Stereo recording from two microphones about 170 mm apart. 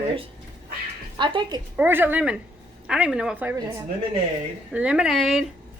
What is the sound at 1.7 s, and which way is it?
A woman's voice, 10° right (ahead or behind).